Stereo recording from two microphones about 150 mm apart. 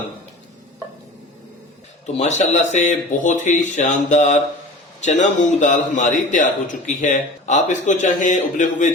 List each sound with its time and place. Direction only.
2.1 s a man's voice: 50° left (ahead or behind)